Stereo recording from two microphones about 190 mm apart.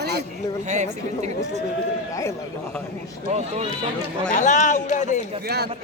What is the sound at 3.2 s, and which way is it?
Speech, 35° right (ahead or behind).